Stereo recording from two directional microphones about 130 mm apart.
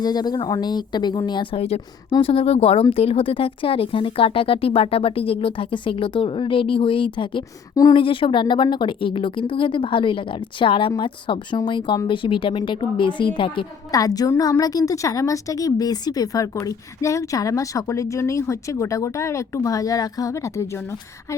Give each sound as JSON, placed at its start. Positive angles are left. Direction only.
{"t": 0.0, "sound": "a woman's voice", "side_deg": 30}
{"t": 1.5, "sound": "a woman's voice", "side_deg": 50}
{"t": 13.9, "sound": "a woman's voice", "side_deg": 30}